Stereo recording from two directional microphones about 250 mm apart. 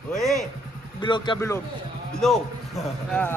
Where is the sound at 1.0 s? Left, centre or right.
Centre.